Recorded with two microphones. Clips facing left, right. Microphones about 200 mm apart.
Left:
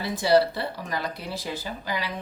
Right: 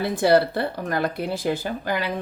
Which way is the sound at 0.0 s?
55° right (ahead or behind).